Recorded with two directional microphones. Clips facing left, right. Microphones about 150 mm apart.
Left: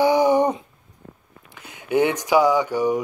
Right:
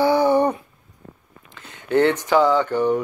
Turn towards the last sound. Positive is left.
turn(degrees=10)  # may be behind; listen again after turning